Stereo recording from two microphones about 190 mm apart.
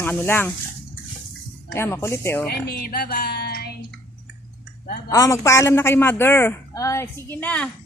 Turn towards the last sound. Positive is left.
turn(degrees=5)  # may be behind; listen again after turning